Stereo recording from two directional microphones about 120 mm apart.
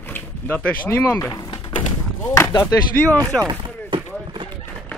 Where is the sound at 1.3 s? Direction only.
40° left (ahead or behind).